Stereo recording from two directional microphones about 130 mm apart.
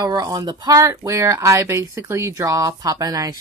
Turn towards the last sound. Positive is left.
turn(degrees=-30)  # may be behind; listen again after turning